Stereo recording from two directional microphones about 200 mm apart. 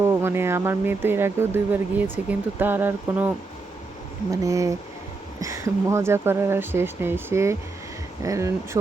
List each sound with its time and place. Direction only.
0.0 s speech: 10° right (ahead or behind)